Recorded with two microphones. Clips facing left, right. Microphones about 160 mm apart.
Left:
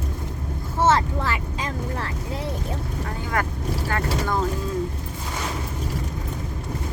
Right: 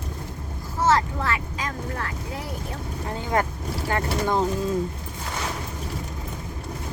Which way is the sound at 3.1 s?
25° right (ahead or behind).